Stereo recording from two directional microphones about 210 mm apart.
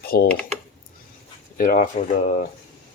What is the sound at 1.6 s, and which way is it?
Speech, 40° left (ahead or behind).